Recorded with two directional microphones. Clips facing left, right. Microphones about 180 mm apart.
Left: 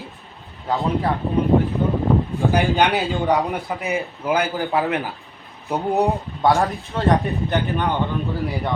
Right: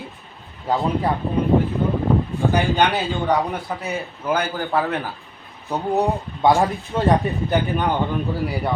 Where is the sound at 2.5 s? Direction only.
15° left (ahead or behind).